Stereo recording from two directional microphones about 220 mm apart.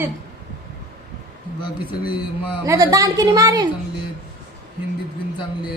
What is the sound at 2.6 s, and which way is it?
A woman's voice, 15° right (ahead or behind).